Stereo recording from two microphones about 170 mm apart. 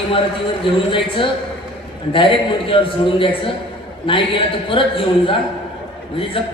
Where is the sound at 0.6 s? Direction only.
30° left (ahead or behind).